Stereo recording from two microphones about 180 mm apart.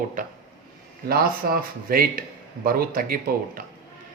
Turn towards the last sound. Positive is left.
turn(degrees=-55)  # may be behind; listen again after turning